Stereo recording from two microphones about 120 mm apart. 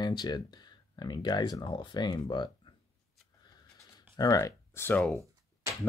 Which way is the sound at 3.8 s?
30° left (ahead or behind).